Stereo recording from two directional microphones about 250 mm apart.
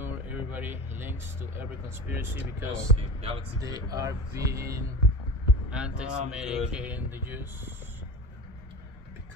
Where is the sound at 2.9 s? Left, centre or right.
Right.